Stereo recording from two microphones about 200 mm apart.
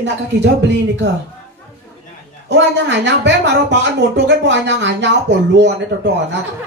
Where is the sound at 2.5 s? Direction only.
60° right (ahead or behind).